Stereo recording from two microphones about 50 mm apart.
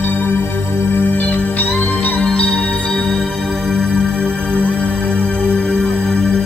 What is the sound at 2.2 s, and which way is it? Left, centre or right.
Music, left.